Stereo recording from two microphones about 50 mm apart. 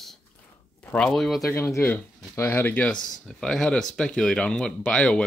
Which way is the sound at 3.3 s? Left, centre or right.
Centre.